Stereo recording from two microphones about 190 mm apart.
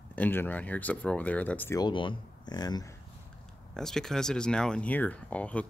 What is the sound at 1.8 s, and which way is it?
Speech, 25° left (ahead or behind).